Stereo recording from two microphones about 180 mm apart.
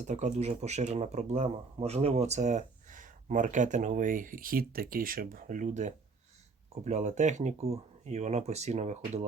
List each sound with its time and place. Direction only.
0.1 s speech: 40° right (ahead or behind)